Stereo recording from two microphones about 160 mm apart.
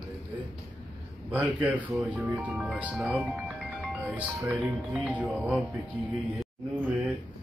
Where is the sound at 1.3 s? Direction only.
10° right (ahead or behind).